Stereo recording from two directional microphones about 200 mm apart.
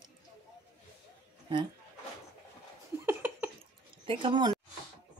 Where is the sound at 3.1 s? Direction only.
10° right (ahead or behind).